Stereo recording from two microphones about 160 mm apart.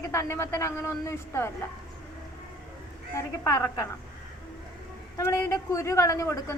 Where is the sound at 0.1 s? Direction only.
20° left (ahead or behind).